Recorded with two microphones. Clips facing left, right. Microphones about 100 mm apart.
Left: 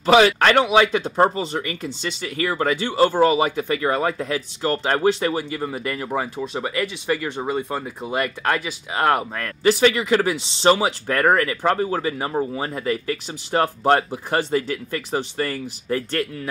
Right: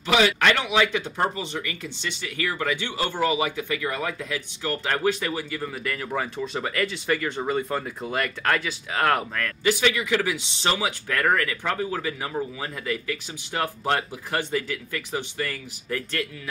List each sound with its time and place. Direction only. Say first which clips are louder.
0.0 s speech: left 6 dB; 40° left (ahead or behind)
6.1 s speech: left 2 dB; 10° left (ahead or behind)
9.3 s speech: left 5 dB; 30° left (ahead or behind)